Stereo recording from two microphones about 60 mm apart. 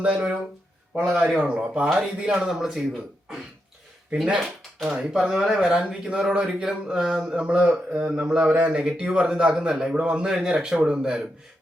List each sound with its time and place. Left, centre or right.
0.0 s speech: right
1.4 s speech: centre
4.1 s speech: centre
8.3 s speech: centre